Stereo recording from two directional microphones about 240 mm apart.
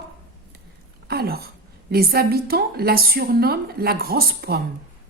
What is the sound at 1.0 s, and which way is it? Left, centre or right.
Speech, right.